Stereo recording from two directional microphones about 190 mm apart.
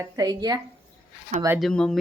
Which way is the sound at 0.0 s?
20° right (ahead or behind).